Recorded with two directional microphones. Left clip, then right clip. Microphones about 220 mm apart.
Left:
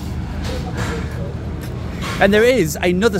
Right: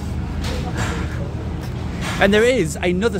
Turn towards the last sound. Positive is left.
turn(degrees=20)  # may be behind; listen again after turning